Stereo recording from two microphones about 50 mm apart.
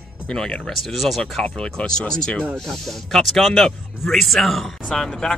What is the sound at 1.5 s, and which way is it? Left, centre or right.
Speech, centre.